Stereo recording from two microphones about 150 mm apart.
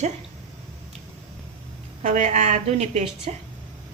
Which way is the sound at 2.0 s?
55° right (ahead or behind).